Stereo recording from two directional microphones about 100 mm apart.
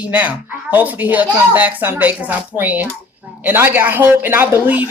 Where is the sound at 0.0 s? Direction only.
15° right (ahead or behind).